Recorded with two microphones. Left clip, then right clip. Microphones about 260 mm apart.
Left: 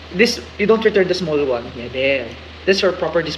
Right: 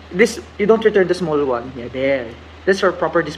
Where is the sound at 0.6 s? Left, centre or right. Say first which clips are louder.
Right 1 dB; centre.